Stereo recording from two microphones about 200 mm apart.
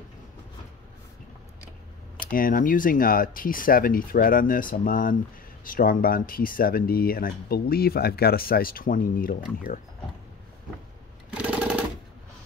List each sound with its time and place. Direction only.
2.1 s speech: 45° left (ahead or behind)
11.3 s sewing machine: 5° right (ahead or behind)